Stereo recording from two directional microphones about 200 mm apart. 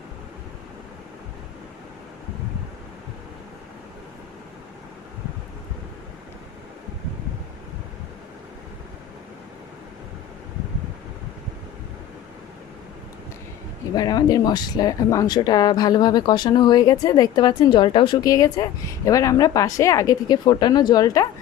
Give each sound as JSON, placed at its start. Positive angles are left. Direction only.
{"t": 13.9, "sound": "speech", "side_deg": 20}